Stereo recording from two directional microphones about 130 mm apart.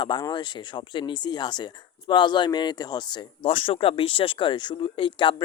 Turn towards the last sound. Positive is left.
turn(degrees=40)  # may be behind; listen again after turning